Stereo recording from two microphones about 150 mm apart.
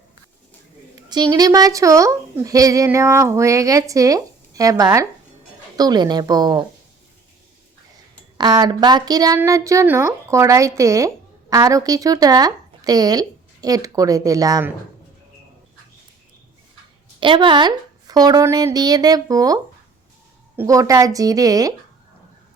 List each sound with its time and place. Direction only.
1.1 s speech: 25° right (ahead or behind)
8.4 s speech: 25° right (ahead or behind)
17.2 s speech: 35° right (ahead or behind)
20.6 s speech: 20° right (ahead or behind)